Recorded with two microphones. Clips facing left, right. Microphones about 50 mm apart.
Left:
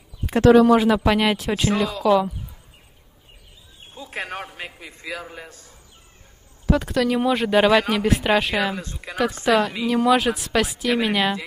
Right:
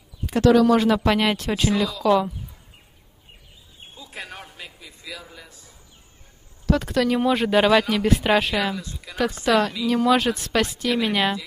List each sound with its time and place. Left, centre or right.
0.3 s speech: left
0.7 s a woman's voice: centre
3.9 s a sound: left
6.7 s a woman's voice: centre
8.7 s speech: left
9.4 s a woman's voice: centre